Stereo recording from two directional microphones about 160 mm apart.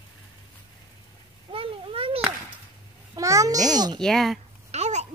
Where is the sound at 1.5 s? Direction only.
35° right (ahead or behind).